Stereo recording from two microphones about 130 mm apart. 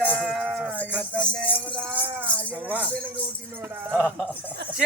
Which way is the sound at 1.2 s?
5° left (ahead or behind).